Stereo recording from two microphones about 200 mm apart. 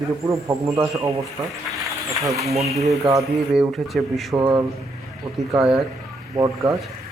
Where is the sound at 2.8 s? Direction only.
15° right (ahead or behind).